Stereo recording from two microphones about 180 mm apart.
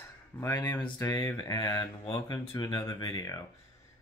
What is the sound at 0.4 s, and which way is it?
Speech, 15° left (ahead or behind).